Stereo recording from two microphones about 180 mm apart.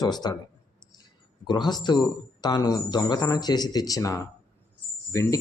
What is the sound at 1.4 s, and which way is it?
Speech, 25° left (ahead or behind).